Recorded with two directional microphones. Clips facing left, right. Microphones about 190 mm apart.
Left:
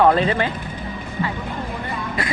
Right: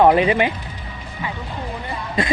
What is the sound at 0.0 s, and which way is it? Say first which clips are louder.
Speech: right 2 dB; 15° right (ahead or behind).